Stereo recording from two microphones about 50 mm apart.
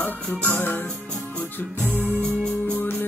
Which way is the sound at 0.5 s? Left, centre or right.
Left.